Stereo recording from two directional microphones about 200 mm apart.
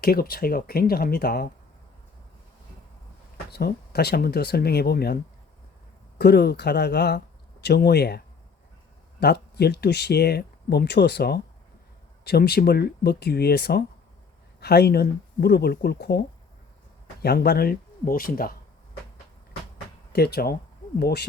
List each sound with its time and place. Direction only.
0.0 s speech: 50° left (ahead or behind)
3.5 s speech: 55° left (ahead or behind)
9.2 s speech: 55° left (ahead or behind)
17.2 s speech: 50° left (ahead or behind)
20.1 s speech: 50° left (ahead or behind)